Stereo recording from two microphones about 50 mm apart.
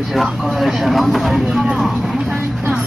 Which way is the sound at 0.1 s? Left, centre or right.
Centre.